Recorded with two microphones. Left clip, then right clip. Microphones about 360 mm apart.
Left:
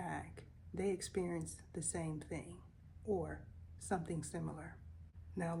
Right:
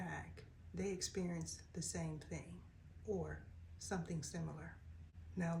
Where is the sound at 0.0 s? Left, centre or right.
Centre.